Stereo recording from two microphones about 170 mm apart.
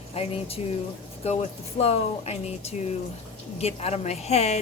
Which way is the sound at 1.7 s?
35° left (ahead or behind).